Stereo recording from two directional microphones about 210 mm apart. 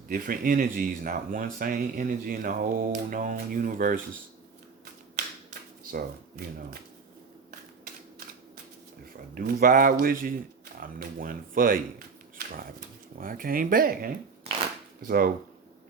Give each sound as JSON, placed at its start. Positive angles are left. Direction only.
{"t": 0.1, "sound": "speech", "side_deg": -40}
{"t": 5.8, "sound": "speech", "side_deg": -45}
{"t": 9.3, "sound": "speech", "side_deg": -45}